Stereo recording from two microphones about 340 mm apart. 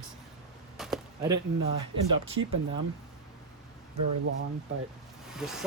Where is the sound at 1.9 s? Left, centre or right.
Centre.